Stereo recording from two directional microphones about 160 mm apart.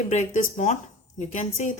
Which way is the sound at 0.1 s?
50° left (ahead or behind).